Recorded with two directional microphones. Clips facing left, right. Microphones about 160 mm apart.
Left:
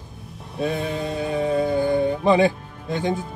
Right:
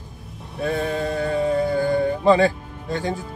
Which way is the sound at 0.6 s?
20° left (ahead or behind).